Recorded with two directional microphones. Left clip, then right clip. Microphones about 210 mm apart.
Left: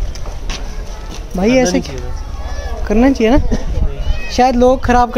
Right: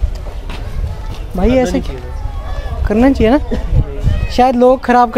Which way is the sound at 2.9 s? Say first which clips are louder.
Right 1 dB; 10° right (ahead or behind).